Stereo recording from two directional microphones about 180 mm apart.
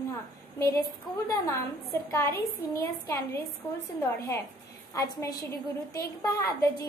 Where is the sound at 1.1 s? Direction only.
Centre (ahead or behind).